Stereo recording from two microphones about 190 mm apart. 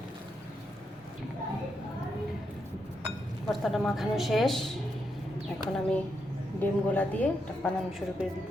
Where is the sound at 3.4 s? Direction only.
Centre (ahead or behind).